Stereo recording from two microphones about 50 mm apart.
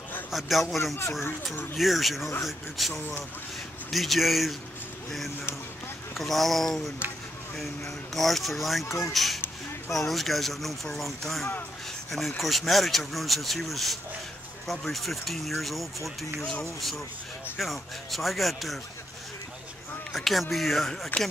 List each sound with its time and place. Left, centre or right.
0.3 s speech: centre
6.1 s speech: centre
8.1 s speech: centre
8.8 s speech: left
9.1 s speech: centre
17.6 s speech: centre
20.1 s speech: centre